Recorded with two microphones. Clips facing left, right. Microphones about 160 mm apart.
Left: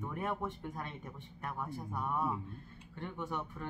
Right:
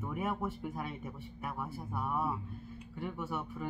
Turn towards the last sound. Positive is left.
turn(degrees=-5)  # may be behind; listen again after turning